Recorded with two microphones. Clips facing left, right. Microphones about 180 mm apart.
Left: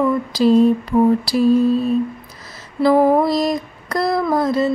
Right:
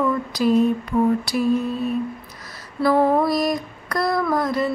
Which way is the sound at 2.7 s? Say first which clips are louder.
Left 4 dB; 25° left (ahead or behind).